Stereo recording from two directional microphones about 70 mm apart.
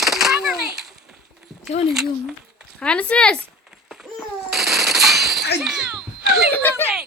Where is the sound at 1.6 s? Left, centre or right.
Centre.